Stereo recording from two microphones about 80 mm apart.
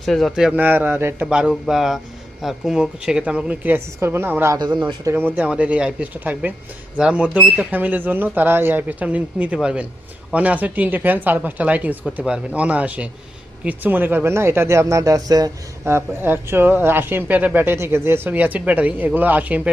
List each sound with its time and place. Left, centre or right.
0.0 s a man's voice: centre
0.5 s speech: right
1.3 s a man's voice: centre
4.0 s speech: right
4.5 s speech: right
5.0 s speech: right
5.4 s a man's voice: centre
14.3 s speech: right
15.8 s speech: right